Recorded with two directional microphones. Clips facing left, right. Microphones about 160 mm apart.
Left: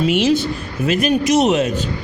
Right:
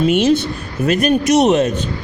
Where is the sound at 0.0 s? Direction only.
45° right (ahead or behind).